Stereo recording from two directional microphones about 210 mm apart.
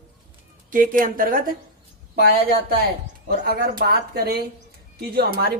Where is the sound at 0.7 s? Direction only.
40° right (ahead or behind).